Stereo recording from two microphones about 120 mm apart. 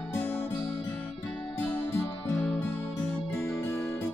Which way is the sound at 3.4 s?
20° left (ahead or behind).